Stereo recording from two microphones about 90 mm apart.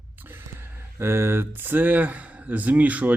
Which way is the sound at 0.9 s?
30° right (ahead or behind).